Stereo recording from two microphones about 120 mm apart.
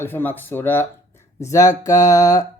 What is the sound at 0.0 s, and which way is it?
Speech, 15° left (ahead or behind).